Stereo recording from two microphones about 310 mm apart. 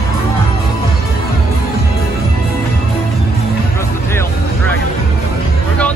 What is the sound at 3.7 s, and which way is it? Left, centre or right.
Vehicle, centre.